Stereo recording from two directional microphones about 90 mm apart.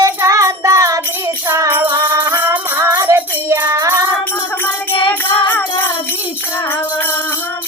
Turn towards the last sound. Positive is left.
turn(degrees=20)  # may be behind; listen again after turning